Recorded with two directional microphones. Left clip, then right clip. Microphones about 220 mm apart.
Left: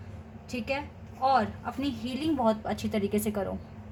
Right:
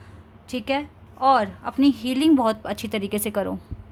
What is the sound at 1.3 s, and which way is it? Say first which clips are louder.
Speech: right 7 dB; 50° right (ahead or behind).